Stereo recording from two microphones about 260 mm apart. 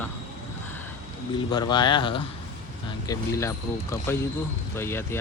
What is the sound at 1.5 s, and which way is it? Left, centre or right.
Speech, centre.